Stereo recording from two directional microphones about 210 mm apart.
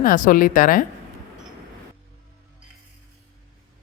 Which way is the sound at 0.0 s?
40° left (ahead or behind).